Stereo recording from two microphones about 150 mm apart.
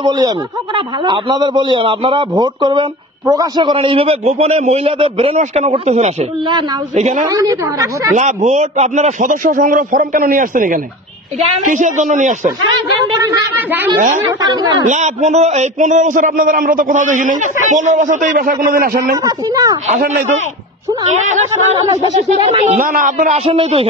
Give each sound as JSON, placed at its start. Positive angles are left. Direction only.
{"t": 0.0, "sound": "a woman's voice", "side_deg": -25}
{"t": 7.2, "sound": "a woman's voice", "side_deg": -20}
{"t": 8.2, "sound": "a man's voice", "side_deg": -50}
{"t": 13.1, "sound": "a woman's voice", "side_deg": -25}
{"t": 14.4, "sound": "a woman's voice", "side_deg": -25}
{"t": 14.9, "sound": "a man's voice", "side_deg": -50}
{"t": 19.2, "sound": "a woman's voice", "side_deg": -25}
{"t": 20.0, "sound": "speech", "side_deg": -85}
{"t": 21.0, "sound": "speech", "side_deg": -50}
{"t": 22.8, "sound": "a man's voice", "side_deg": -65}
{"t": 23.3, "sound": "a man's voice", "side_deg": -40}